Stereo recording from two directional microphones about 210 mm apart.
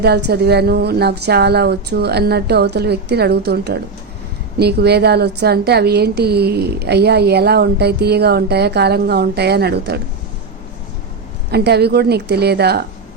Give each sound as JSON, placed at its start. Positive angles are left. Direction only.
{"t": 0.0, "sound": "a woman's voice", "side_deg": -50}
{"t": 11.5, "sound": "a woman's voice", "side_deg": -50}